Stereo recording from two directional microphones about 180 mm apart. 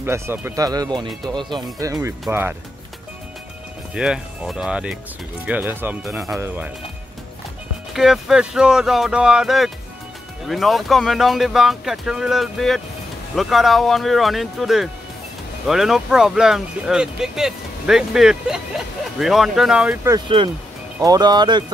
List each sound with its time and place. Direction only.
0.0 s speech: 10° right (ahead or behind)
0.7 s speech: 20° right (ahead or behind)
3.9 s speech: 5° right (ahead or behind)
7.9 s speech: centre (ahead or behind)
21.0 s speech: 20° right (ahead or behind)